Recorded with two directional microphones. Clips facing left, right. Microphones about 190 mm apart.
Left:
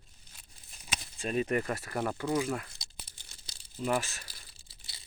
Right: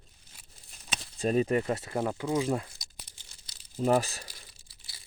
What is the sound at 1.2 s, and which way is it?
Speech, 35° right (ahead or behind).